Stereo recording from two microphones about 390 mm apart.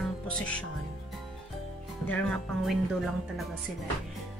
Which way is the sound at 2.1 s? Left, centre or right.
Centre.